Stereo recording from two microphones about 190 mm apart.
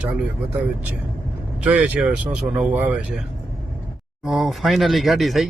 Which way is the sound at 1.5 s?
5° right (ahead or behind).